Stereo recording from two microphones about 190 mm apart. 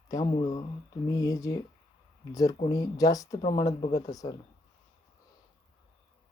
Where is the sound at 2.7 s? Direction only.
20° left (ahead or behind).